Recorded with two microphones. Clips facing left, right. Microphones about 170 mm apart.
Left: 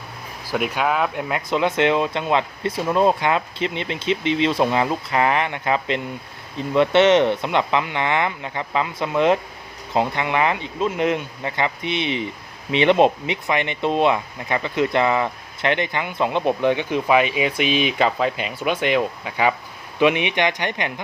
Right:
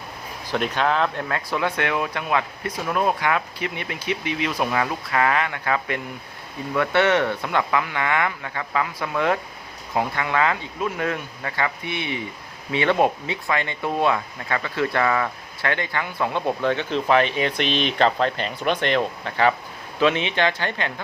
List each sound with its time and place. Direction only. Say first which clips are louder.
0.4 s speech: left 1 dB; 10° left (ahead or behind)